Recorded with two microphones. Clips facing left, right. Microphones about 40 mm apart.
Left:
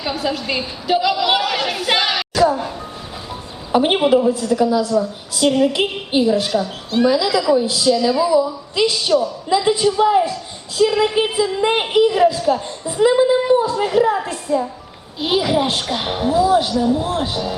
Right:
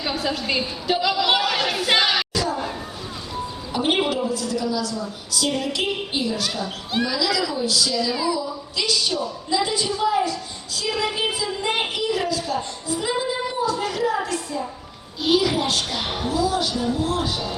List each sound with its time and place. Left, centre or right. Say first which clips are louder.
0.0 s a woman's voice: left 3 dB; centre
2.3 s a sound: left 9 dB; left
3.7 s a woman's voice: left 8 dB; left